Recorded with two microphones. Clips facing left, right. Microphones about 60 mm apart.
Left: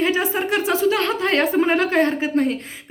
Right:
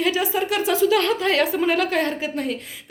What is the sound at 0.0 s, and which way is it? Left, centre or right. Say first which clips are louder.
A woman's voice: left 1 dB; left.